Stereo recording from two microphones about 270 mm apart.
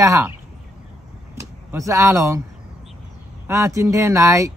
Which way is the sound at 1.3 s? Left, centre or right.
Centre.